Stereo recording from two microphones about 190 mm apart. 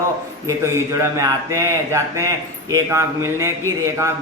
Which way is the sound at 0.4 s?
15° right (ahead or behind).